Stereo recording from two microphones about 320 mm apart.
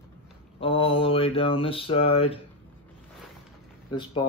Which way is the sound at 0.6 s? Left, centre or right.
Centre.